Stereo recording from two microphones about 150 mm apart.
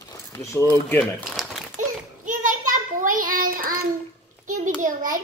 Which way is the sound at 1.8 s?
65° right (ahead or behind).